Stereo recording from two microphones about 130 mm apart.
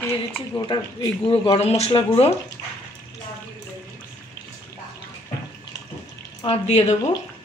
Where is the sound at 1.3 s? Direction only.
50° left (ahead or behind).